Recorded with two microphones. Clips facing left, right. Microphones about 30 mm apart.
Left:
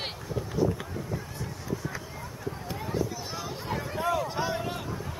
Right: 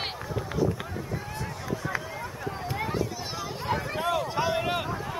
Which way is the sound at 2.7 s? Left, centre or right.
Right.